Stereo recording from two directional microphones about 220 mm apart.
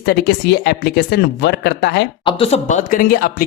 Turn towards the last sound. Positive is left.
turn(degrees=40)  # may be behind; listen again after turning